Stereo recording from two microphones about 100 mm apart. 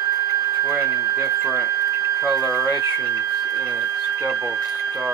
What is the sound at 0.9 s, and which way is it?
Speech, 35° right (ahead or behind).